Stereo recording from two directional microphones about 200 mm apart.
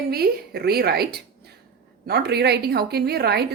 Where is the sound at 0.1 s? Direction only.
50° right (ahead or behind).